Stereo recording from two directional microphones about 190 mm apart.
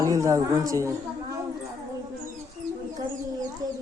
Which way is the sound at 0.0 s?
15° right (ahead or behind).